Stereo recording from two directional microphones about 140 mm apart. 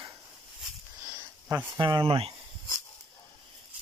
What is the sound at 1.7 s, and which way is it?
Speech, 30° right (ahead or behind).